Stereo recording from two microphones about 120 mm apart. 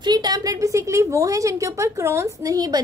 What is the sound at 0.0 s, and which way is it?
A woman's voice, 35° right (ahead or behind).